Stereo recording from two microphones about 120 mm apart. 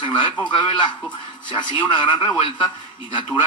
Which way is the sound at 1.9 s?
40° left (ahead or behind).